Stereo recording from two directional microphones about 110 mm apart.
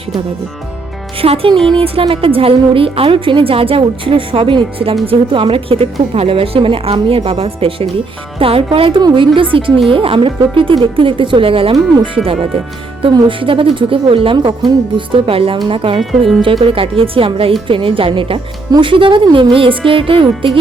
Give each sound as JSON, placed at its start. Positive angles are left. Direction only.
{"t": 1.2, "sound": "a woman's voice", "side_deg": -60}